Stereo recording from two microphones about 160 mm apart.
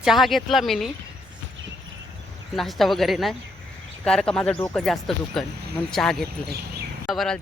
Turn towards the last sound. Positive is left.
turn(degrees=0)  # may be behind; listen again after turning